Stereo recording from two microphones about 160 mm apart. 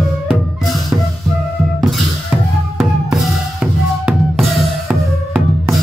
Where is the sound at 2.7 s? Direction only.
5° right (ahead or behind).